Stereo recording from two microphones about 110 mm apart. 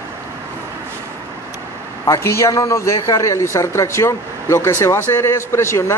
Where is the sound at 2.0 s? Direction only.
30° left (ahead or behind).